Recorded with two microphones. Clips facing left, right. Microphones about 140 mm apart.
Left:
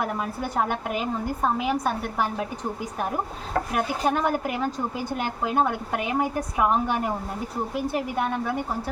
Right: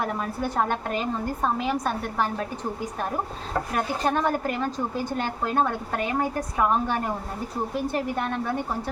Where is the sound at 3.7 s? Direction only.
10° left (ahead or behind).